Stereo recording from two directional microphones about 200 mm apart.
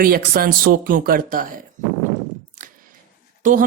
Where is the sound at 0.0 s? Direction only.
45° right (ahead or behind).